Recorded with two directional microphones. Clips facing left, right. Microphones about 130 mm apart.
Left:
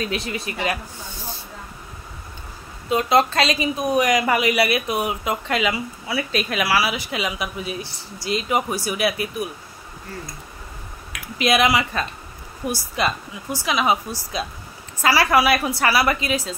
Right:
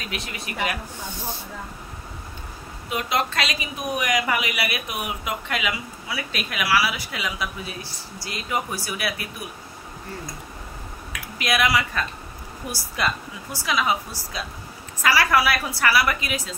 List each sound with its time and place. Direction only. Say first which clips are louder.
0.1 s a woman's voice: left 6 dB; 30° left (ahead or behind)
2.9 s a woman's voice: left 7 dB; 35° left (ahead or behind)
11.3 s a woman's voice: left 4 dB; 25° left (ahead or behind)